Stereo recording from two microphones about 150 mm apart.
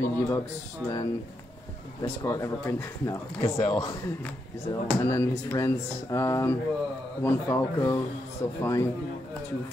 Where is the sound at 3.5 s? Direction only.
40° left (ahead or behind).